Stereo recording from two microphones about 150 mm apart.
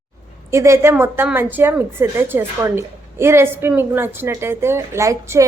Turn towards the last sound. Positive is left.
turn(degrees=-20)  # may be behind; listen again after turning